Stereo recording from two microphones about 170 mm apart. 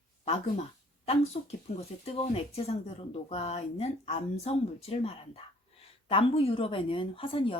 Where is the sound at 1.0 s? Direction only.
40° left (ahead or behind).